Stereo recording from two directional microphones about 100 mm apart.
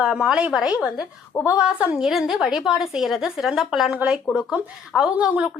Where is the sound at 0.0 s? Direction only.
5° right (ahead or behind).